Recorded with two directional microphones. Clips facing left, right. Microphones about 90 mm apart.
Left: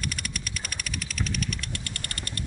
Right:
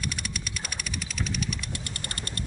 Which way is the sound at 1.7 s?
20° right (ahead or behind).